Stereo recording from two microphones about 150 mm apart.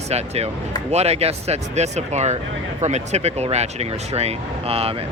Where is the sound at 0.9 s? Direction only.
45° right (ahead or behind).